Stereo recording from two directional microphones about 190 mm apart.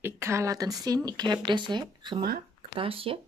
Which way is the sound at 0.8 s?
20° right (ahead or behind).